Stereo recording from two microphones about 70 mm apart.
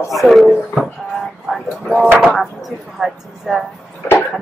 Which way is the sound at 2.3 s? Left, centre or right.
Centre.